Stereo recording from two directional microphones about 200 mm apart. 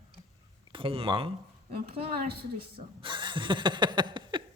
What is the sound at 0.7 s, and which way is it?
A woman's voice, 25° right (ahead or behind).